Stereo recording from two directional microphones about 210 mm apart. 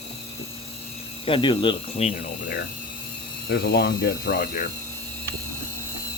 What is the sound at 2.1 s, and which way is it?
Speech, 40° left (ahead or behind).